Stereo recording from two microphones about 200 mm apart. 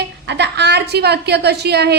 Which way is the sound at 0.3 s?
55° right (ahead or behind).